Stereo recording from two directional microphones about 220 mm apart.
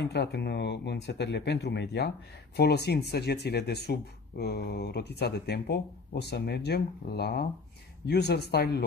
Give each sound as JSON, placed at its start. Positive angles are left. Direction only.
{"t": 0.0, "sound": "speech", "side_deg": 50}